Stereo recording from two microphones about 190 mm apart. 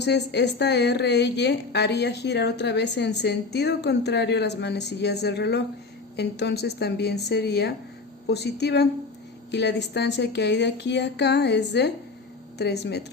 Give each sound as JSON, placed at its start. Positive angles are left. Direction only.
{"t": 0.0, "sound": "speech", "side_deg": 60}